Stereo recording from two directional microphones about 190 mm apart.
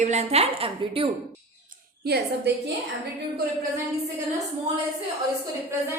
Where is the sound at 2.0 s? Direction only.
55° right (ahead or behind).